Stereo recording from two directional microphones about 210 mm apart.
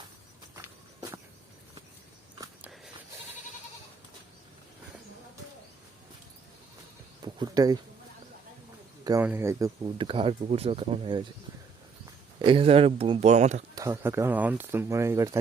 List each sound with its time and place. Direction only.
2.4 s walk: 5° right (ahead or behind)
7.3 s speech: 20° right (ahead or behind)
9.0 s speech: 10° right (ahead or behind)
12.4 s speech: 25° right (ahead or behind)
13.7 s speech: 15° right (ahead or behind)